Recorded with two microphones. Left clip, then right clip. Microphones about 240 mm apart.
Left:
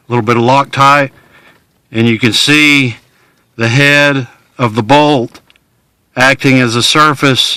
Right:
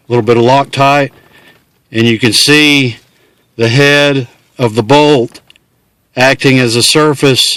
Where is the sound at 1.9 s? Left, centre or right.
Centre.